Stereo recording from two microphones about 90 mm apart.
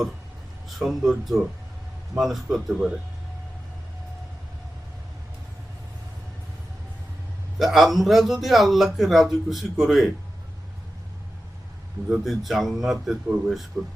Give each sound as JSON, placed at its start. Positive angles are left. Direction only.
{"t": 0.8, "sound": "a man's voice", "side_deg": 0}
{"t": 7.6, "sound": "a man's voice", "side_deg": 0}
{"t": 12.0, "sound": "a man's voice", "side_deg": -5}
{"t": 13.7, "sound": "speech", "side_deg": -25}